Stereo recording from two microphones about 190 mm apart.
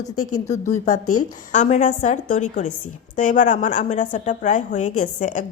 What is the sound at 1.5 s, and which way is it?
A woman's voice, 40° left (ahead or behind).